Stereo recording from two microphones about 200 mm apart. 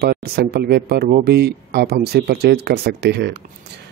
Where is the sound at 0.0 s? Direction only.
55° right (ahead or behind).